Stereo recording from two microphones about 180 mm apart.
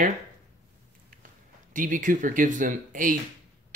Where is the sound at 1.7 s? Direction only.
45° right (ahead or behind).